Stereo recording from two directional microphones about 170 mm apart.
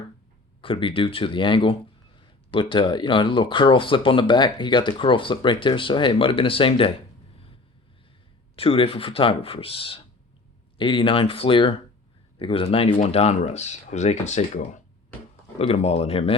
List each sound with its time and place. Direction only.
0.6 s speech: 30° left (ahead or behind)
8.5 s speech: 35° left (ahead or behind)